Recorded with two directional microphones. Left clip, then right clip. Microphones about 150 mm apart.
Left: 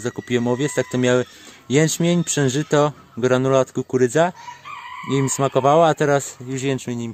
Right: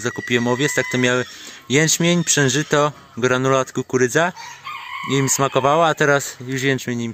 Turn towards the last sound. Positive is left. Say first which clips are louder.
# right 3 dB
turn(degrees=5)  # may be behind; listen again after turning